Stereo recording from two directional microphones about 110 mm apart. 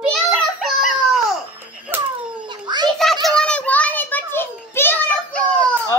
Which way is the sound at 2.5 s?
40° right (ahead or behind).